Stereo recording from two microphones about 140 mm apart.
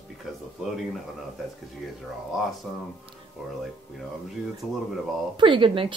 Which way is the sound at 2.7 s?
Centre (ahead or behind).